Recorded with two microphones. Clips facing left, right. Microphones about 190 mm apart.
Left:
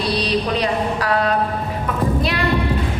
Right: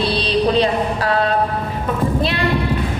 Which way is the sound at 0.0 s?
30° right (ahead or behind).